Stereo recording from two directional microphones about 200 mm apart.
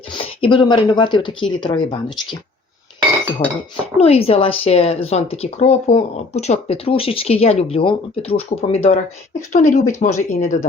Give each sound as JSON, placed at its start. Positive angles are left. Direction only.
{"t": 0.4, "sound": "speech", "side_deg": 25}
{"t": 3.4, "sound": "speech", "side_deg": 30}